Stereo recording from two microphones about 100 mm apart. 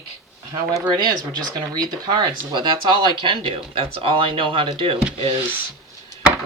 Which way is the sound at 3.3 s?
60° right (ahead or behind).